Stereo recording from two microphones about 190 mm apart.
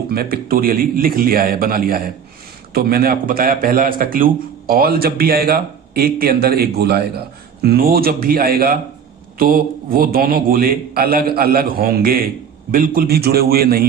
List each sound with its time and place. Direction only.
0.1 s a man's voice: 50° right (ahead or behind)